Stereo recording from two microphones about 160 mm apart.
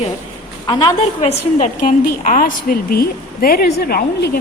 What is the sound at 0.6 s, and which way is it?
Speech, 25° left (ahead or behind).